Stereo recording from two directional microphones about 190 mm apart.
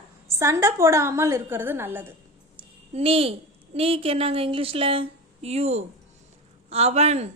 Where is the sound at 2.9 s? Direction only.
30° right (ahead or behind).